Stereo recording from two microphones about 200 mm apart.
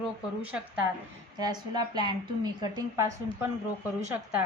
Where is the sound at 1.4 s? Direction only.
20° right (ahead or behind).